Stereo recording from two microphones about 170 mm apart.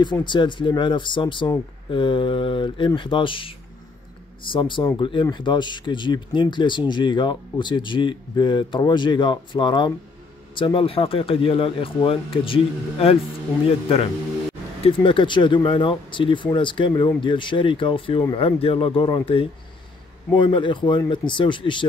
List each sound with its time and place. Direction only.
0.0 s speech: 25° left (ahead or behind)
14.8 s speech: 30° left (ahead or behind)